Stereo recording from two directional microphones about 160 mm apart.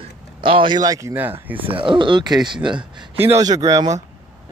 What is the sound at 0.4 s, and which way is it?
Speech, 30° right (ahead or behind).